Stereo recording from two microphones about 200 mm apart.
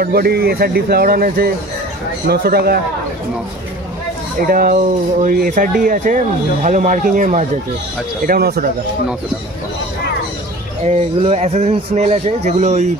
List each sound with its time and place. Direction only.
0.0 s speech: 50° right (ahead or behind)
4.5 s speech: 45° right (ahead or behind)
8.3 s speech: 50° right (ahead or behind)
10.9 s speech: 35° right (ahead or behind)